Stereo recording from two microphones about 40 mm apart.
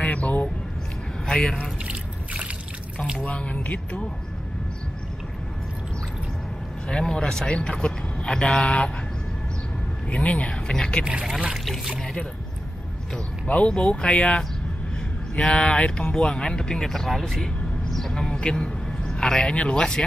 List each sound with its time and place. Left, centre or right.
0.0 s a sound: left
1.2 s speech: centre
1.9 s trickle: right
3.3 s speech: left
6.9 s speech: centre
10.0 s speech: left
10.5 s speech: left
11.5 s speech: centre
13.5 s speech: left
15.5 s speech: left; by 17.5 s centre
18.1 s a sound: centre
19.7 s speech: centre